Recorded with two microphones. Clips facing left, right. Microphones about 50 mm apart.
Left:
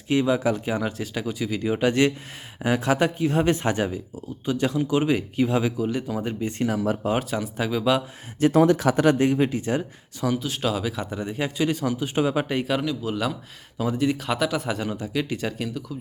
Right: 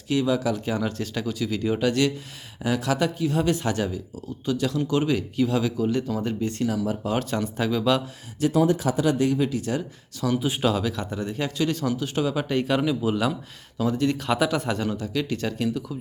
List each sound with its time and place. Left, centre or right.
0.1 s speech: left
0.5 s speech: centre
5.7 s speech: centre
8.4 s speech: left
8.6 s speech: left
9.1 s speech: left
10.6 s speech: centre
12.8 s speech: centre
13.7 s speech: centre